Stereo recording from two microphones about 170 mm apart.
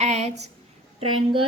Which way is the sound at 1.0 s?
30° right (ahead or behind).